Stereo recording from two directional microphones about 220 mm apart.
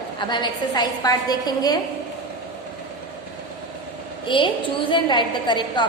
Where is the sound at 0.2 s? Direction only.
20° left (ahead or behind).